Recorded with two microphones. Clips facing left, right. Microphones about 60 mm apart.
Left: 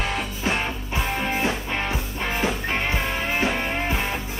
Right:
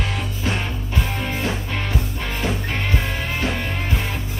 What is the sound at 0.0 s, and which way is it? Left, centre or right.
Music, centre.